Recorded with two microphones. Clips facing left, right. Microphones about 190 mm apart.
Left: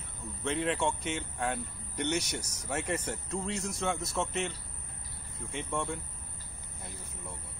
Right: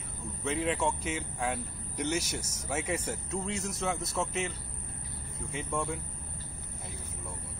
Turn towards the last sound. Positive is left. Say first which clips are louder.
# right 1 dB
turn(degrees=-5)  # may be behind; listen again after turning